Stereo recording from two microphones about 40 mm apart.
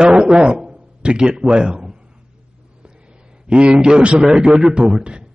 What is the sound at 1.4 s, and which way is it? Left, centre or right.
Speech, right.